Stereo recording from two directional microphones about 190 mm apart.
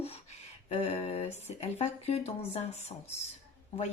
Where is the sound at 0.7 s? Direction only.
35° left (ahead or behind).